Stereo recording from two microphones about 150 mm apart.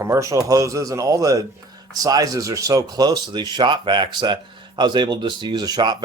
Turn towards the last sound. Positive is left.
turn(degrees=-30)  # may be behind; listen again after turning